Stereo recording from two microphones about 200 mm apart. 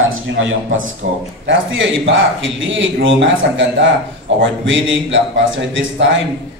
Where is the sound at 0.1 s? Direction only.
75° right (ahead or behind).